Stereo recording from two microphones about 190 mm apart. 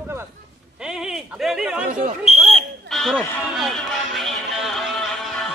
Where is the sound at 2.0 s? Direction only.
35° right (ahead or behind).